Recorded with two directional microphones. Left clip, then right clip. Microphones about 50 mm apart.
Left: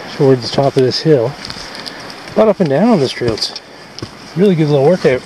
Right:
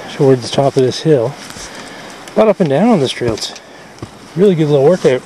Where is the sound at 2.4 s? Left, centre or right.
Right.